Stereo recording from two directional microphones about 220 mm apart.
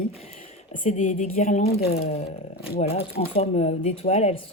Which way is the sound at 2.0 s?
25° left (ahead or behind).